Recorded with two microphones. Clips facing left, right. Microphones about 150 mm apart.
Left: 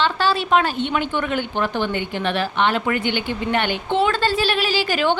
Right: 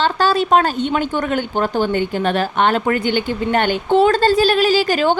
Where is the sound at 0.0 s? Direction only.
45° right (ahead or behind).